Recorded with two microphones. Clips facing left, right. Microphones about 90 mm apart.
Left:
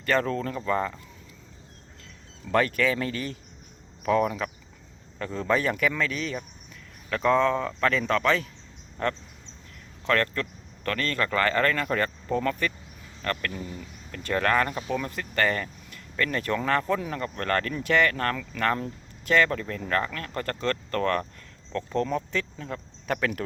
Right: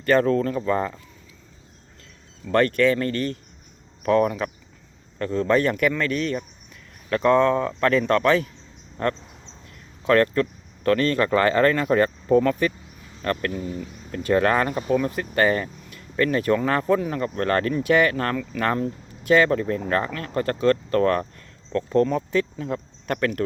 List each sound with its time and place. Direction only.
0.0 s speech: 5° right (ahead or behind)
2.5 s speech: 5° left (ahead or behind)
10.1 s speech: 15° right (ahead or behind)
21.7 s speech: centre (ahead or behind)
23.0 s speech: 5° left (ahead or behind)